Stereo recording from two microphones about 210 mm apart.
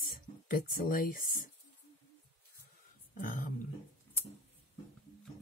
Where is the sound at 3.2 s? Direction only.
40° left (ahead or behind).